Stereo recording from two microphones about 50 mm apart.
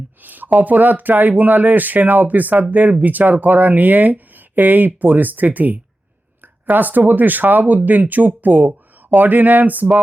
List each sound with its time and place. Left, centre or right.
0.2 s speech: right